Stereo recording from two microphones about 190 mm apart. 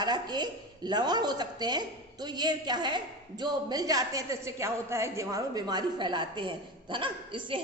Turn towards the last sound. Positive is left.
turn(degrees=-25)  # may be behind; listen again after turning